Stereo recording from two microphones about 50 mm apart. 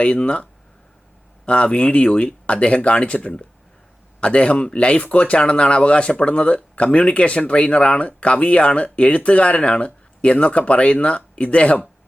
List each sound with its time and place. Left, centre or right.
0.0 s speech: left
1.5 s speech: left